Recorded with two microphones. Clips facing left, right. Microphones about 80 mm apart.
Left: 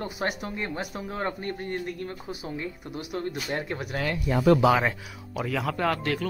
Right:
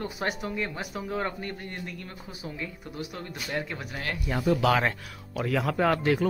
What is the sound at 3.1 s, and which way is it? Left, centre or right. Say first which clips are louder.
Speech: left 5 dB; left.